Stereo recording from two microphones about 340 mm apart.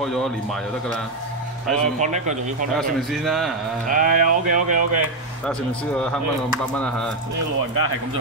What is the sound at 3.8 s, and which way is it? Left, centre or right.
Speech, right.